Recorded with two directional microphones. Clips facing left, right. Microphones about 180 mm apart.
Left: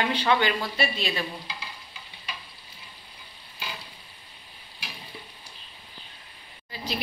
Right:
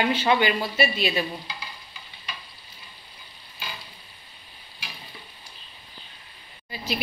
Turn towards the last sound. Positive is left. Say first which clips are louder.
# right 2 dB
turn(degrees=-10)  # may be behind; listen again after turning